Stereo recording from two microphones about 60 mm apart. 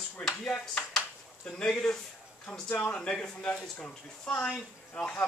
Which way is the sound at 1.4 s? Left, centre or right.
Centre.